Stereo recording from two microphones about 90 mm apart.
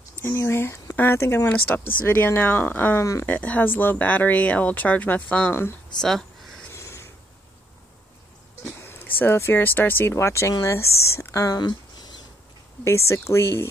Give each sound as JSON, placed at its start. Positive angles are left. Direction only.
{"t": 0.2, "sound": "speech", "side_deg": 30}
{"t": 3.0, "sound": "speech", "side_deg": 35}
{"t": 3.3, "sound": "speech", "side_deg": 15}
{"t": 5.9, "sound": "a sound", "side_deg": 5}
{"t": 6.7, "sound": "a sound", "side_deg": 30}
{"t": 8.6, "sound": "speech", "side_deg": 25}
{"t": 12.8, "sound": "speech", "side_deg": 30}